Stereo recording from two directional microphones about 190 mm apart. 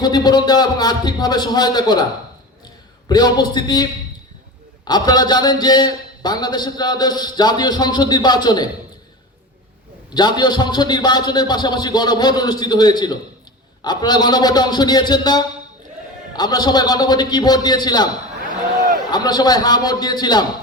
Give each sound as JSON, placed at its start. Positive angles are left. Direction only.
{"t": 0.0, "sound": "a man's voice", "side_deg": 20}
{"t": 3.1, "sound": "a man's voice", "side_deg": 20}
{"t": 4.9, "sound": "a man's voice", "side_deg": 20}
{"t": 10.2, "sound": "a man's voice", "side_deg": 20}
{"t": 19.1, "sound": "a man's voice", "side_deg": 20}